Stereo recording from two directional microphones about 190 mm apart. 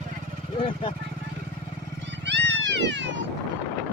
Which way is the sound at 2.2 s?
70° right (ahead or behind).